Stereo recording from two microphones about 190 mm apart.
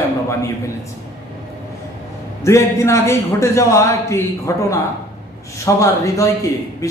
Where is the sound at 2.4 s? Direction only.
15° left (ahead or behind).